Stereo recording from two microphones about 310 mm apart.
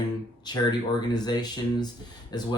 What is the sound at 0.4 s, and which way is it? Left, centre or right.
Speech, centre.